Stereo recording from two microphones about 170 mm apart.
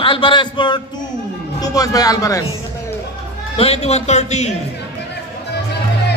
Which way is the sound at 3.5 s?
35° left (ahead or behind).